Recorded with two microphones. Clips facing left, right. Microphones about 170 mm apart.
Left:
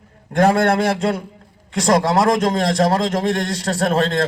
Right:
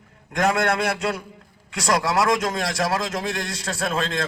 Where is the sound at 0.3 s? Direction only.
30° left (ahead or behind).